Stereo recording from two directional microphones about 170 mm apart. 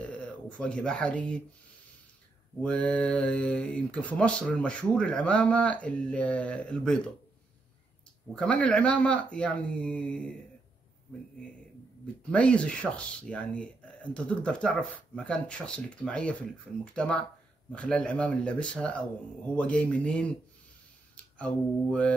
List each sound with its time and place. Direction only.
0.0 s speech: 5° left (ahead or behind)
2.6 s speech: 5° left (ahead or behind)
8.4 s speech: 5° left (ahead or behind)
12.3 s speech: 5° left (ahead or behind)